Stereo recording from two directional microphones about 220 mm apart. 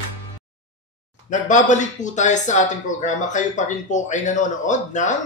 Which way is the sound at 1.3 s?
35° left (ahead or behind).